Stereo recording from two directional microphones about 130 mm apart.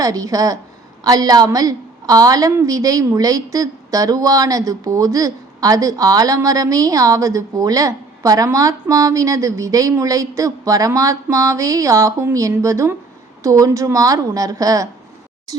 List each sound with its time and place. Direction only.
0.0 s a woman's voice: 25° right (ahead or behind)